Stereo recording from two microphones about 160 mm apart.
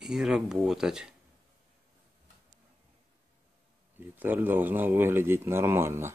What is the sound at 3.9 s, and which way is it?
Speech, 10° right (ahead or behind).